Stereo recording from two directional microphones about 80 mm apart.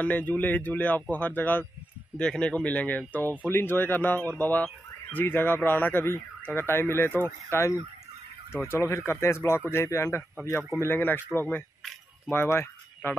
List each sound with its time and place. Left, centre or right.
0.0 s speech: centre
2.1 s speech: centre
12.3 s speech: left